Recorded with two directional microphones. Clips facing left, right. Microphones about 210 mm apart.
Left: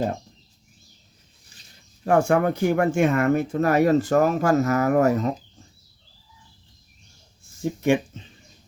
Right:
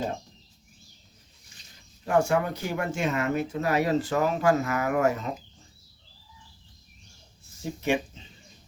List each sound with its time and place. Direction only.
2.0 s speech: 55° left (ahead or behind)
7.6 s speech: 50° left (ahead or behind)